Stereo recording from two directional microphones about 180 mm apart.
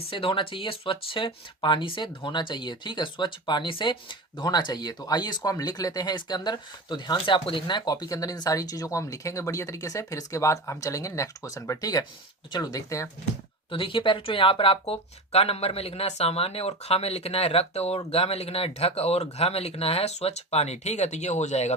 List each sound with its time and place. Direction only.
0.1 s speech: 30° left (ahead or behind)
13.7 s speech: 30° left (ahead or behind)